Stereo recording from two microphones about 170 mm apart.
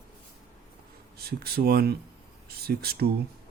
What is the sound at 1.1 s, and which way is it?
Speech, 65° right (ahead or behind).